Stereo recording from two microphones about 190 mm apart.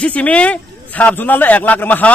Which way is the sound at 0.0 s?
5° left (ahead or behind).